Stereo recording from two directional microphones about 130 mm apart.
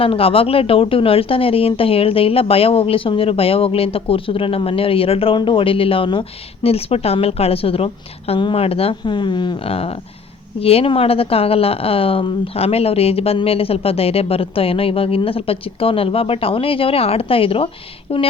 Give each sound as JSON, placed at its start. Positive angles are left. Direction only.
{"t": 0.0, "sound": "speech", "side_deg": 45}